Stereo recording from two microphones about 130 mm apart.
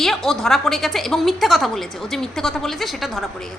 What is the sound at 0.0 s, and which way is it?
A woman's voice, centre (ahead or behind).